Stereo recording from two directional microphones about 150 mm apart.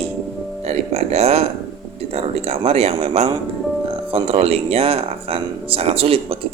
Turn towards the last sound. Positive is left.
turn(degrees=-40)  # may be behind; listen again after turning